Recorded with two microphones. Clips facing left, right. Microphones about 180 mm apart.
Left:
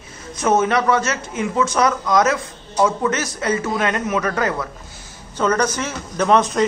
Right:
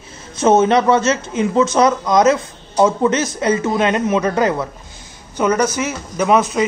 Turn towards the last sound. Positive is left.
turn(degrees=-5)  # may be behind; listen again after turning